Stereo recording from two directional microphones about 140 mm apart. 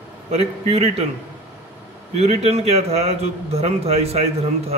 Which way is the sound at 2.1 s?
50° right (ahead or behind).